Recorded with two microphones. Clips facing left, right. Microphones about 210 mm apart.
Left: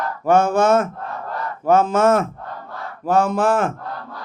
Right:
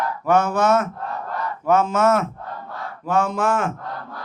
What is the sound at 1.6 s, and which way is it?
A man's voice, 30° left (ahead or behind).